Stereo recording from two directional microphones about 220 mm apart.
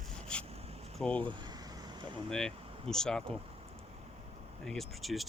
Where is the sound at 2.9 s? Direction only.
5° left (ahead or behind).